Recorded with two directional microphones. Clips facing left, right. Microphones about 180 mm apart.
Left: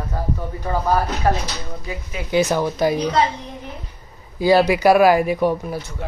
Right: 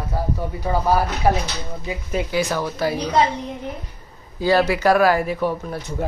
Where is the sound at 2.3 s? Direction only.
20° left (ahead or behind).